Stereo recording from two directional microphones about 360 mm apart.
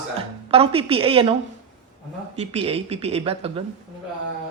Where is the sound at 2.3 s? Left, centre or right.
Centre.